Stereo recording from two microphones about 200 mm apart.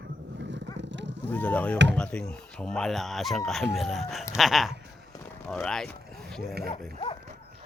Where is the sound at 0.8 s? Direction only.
65° right (ahead or behind).